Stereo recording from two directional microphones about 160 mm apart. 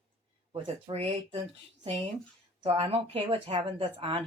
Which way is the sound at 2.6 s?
40° right (ahead or behind).